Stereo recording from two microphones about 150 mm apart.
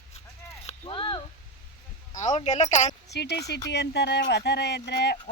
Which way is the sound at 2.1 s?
50° left (ahead or behind).